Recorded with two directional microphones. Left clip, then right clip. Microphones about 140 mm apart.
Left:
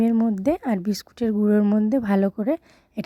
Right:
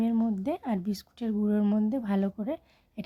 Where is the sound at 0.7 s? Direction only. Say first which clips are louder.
Left 9 dB; 55° left (ahead or behind).